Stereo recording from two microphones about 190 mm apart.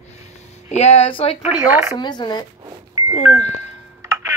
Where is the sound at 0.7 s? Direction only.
35° left (ahead or behind).